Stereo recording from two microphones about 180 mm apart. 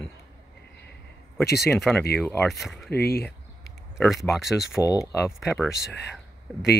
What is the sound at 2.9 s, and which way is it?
Speech, 60° left (ahead or behind).